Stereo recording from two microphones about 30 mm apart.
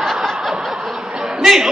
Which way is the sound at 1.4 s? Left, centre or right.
Centre.